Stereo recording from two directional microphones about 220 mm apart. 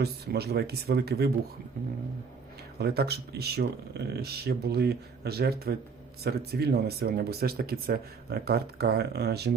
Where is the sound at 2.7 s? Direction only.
45° right (ahead or behind).